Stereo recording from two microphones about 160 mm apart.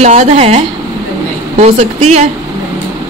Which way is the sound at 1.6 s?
45° right (ahead or behind).